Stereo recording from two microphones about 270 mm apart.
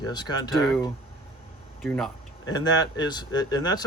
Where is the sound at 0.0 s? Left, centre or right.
Centre.